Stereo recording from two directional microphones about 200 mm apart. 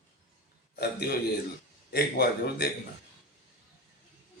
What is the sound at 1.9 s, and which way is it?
Speech, 50° left (ahead or behind).